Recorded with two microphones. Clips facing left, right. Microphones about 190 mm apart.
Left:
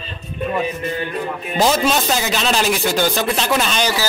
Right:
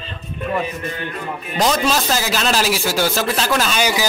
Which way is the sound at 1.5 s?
5° left (ahead or behind).